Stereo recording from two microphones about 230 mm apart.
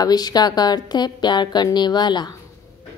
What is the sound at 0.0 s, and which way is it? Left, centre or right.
Speech, centre.